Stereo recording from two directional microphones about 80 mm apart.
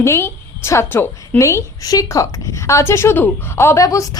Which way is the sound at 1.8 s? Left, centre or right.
Left.